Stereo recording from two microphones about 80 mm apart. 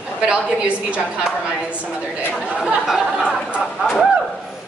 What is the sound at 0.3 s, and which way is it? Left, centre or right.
Speech, centre.